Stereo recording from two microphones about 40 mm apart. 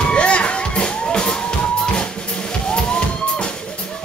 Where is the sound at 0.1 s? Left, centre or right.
Left.